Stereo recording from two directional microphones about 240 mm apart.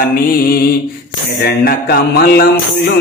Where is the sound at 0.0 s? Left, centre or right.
Left.